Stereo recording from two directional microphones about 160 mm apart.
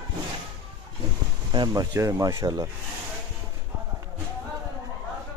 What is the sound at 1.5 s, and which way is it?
Speech, 25° right (ahead or behind).